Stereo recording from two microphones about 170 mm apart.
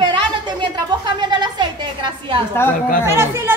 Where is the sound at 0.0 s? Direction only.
25° right (ahead or behind).